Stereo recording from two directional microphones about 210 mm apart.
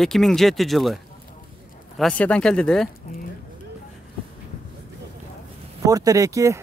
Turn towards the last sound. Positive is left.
turn(degrees=-15)  # may be behind; listen again after turning